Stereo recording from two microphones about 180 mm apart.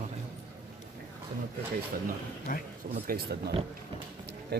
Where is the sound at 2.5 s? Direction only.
50° left (ahead or behind).